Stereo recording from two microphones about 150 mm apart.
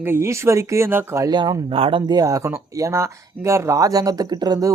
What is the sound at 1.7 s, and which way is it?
Speech, 35° right (ahead or behind).